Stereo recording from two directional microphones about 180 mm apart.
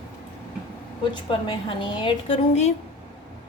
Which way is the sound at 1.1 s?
25° left (ahead or behind).